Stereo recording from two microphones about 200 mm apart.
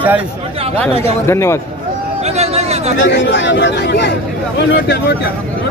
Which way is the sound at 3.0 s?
65° left (ahead or behind).